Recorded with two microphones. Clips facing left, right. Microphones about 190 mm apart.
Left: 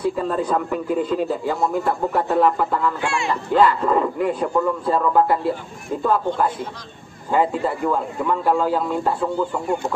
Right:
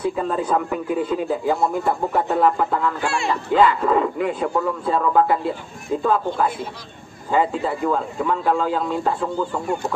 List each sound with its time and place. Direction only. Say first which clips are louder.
0.0 s a man's voice: left 1 dB; 5° right (ahead or behind)
7.2 s a man's voice: left 1 dB; centre (ahead or behind)